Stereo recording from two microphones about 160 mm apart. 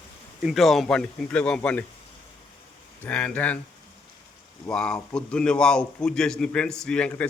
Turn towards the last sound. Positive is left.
turn(degrees=5)  # may be behind; listen again after turning